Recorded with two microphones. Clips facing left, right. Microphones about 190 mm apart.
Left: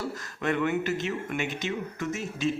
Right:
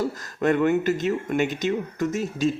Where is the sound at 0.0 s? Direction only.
40° right (ahead or behind).